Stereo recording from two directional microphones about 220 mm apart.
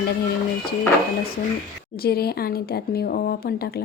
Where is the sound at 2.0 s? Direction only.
45° left (ahead or behind).